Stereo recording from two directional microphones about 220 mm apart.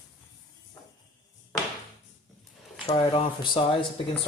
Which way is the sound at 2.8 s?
25° left (ahead or behind).